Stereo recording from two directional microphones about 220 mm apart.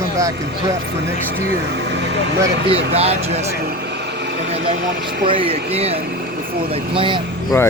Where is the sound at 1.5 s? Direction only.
50° right (ahead or behind).